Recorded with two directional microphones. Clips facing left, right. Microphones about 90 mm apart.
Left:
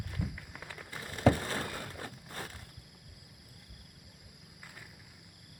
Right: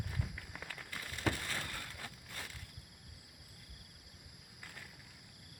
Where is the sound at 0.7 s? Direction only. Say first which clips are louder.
Left 6 dB; 25° left (ahead or behind).